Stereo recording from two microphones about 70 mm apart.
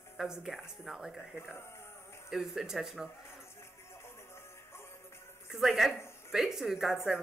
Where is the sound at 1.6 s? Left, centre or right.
Left.